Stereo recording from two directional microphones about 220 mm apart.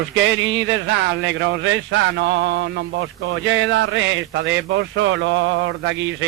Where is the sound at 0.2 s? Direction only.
60° right (ahead or behind).